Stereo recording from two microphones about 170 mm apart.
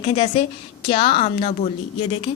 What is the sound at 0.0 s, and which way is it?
A woman's voice, 35° left (ahead or behind).